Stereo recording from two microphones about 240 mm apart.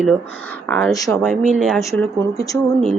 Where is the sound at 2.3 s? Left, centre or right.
Centre.